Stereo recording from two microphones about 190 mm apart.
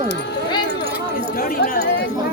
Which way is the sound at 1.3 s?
50° left (ahead or behind).